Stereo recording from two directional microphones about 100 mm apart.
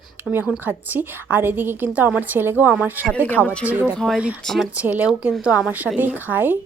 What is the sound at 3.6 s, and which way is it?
Speech, 15° right (ahead or behind).